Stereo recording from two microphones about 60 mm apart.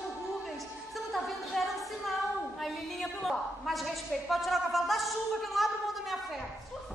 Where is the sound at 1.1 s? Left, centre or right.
Centre.